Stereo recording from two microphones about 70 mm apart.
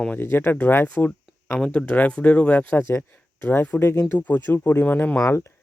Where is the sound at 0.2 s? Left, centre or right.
Left.